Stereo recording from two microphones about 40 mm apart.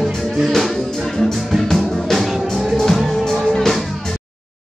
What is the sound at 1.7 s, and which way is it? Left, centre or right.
Music, centre.